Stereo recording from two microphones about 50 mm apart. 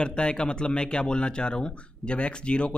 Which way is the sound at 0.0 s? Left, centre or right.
Centre.